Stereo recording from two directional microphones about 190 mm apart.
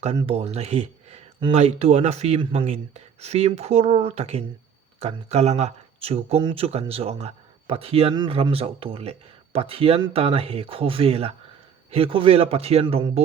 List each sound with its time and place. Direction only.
0.2 s speech: 30° right (ahead or behind)